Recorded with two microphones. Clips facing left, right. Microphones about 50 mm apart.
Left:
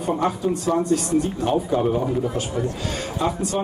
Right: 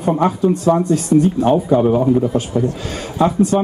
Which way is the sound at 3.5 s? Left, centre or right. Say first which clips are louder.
Right 6 dB; centre.